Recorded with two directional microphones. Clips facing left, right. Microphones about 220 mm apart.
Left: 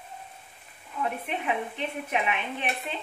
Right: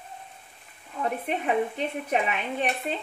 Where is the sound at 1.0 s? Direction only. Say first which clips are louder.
Right 3 dB; 40° right (ahead or behind).